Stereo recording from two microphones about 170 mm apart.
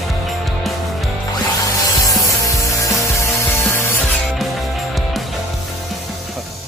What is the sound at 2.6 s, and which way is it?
Ratchet, 20° left (ahead or behind).